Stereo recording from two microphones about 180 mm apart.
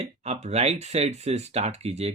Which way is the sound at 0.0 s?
35° right (ahead or behind).